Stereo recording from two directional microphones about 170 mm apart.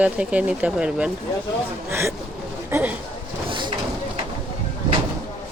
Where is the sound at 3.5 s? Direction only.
30° right (ahead or behind).